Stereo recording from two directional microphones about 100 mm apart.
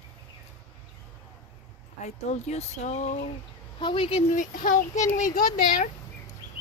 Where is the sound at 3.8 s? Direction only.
60° left (ahead or behind).